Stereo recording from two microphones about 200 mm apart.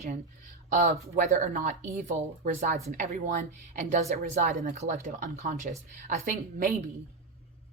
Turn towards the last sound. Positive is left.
turn(degrees=-45)  # may be behind; listen again after turning